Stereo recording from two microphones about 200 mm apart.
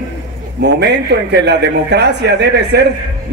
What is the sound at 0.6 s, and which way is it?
A man's voice, 60° right (ahead or behind).